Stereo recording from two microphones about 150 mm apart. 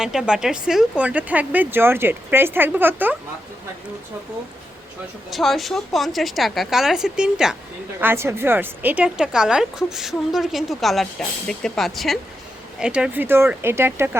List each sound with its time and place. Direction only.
0.0 s speech: 5° right (ahead or behind)
5.3 s a woman's voice: centre (ahead or behind)
8.0 s a woman's voice: 15° right (ahead or behind)